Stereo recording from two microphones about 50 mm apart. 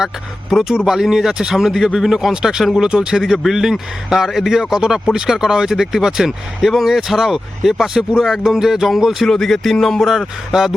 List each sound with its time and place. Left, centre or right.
0.5 s a man's voice: centre
9.3 s speech: centre
10.1 s a man's voice: centre